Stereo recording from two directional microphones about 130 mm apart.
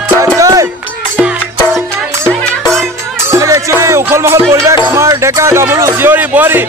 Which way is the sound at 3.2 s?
25° right (ahead or behind).